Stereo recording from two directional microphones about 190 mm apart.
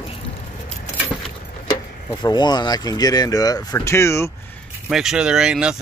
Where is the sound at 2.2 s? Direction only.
25° left (ahead or behind).